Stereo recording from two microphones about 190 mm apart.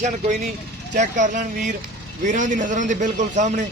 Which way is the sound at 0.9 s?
40° right (ahead or behind).